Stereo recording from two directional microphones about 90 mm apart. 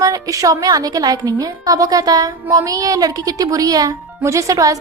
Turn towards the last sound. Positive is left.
turn(degrees=-40)  # may be behind; listen again after turning